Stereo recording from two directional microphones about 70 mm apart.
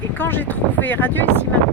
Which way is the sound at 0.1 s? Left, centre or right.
Left.